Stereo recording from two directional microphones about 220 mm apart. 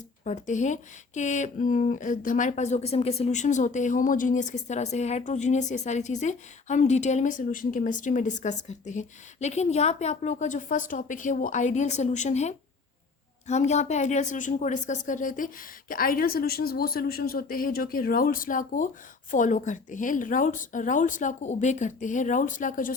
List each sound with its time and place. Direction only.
0.3 s speech: 35° left (ahead or behind)